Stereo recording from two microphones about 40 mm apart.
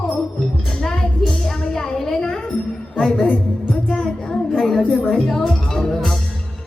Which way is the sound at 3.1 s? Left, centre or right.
Left.